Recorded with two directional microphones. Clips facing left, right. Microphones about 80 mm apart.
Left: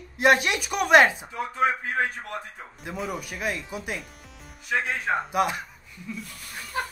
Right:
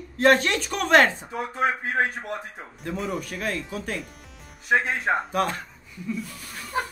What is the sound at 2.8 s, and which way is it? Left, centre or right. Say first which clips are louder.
A man's voice: right 3 dB; centre.